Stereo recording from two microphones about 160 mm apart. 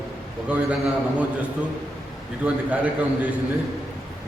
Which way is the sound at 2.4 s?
10° right (ahead or behind).